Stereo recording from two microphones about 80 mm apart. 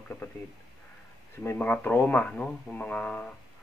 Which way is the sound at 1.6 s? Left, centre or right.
Left.